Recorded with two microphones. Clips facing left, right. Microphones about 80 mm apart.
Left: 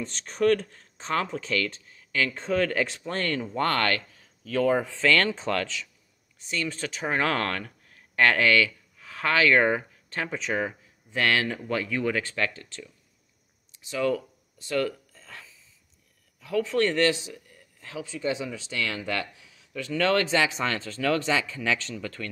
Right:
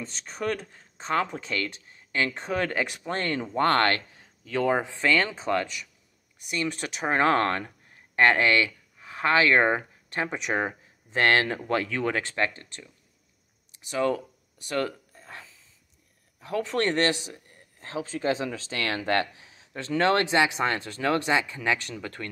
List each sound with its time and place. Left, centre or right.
0.0 s speech: centre
0.4 s speech: centre; by 4.0 s right
4.8 s speech: centre
10.5 s speech: right
15.1 s hiccup: right
16.3 s speech: right
17.3 s a sound: right
18.5 s speech: right
19.7 s speech: right
20.0 s speech: right